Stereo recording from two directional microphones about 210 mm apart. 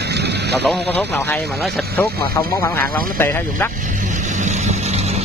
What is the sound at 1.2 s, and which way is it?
Speech, 10° left (ahead or behind).